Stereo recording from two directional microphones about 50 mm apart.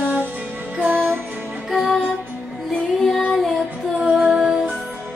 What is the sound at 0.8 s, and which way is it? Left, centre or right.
Music, right.